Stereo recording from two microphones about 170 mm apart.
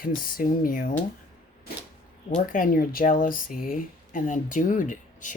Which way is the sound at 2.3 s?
55° left (ahead or behind).